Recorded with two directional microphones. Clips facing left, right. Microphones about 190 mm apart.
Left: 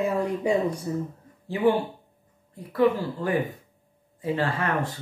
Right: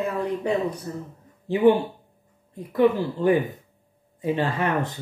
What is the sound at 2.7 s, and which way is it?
Speech, 20° right (ahead or behind).